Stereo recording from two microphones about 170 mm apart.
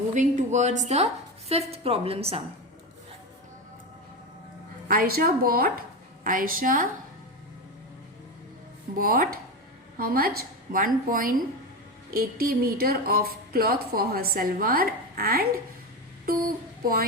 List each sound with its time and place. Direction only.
0.1 s a woman's voice: 45° right (ahead or behind)
4.9 s a woman's voice: 60° right (ahead or behind)
9.0 s a woman's voice: 55° right (ahead or behind)
16.8 s a woman's voice: 60° right (ahead or behind)